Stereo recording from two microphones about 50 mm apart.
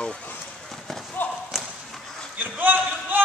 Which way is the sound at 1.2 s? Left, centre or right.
Left.